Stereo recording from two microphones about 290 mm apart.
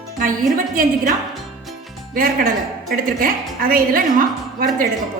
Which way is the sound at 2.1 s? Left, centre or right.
Right.